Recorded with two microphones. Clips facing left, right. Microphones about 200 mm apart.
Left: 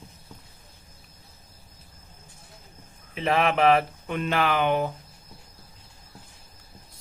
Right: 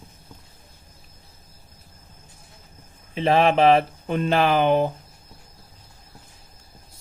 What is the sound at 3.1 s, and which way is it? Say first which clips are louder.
Speech: right 5 dB; 30° right (ahead or behind).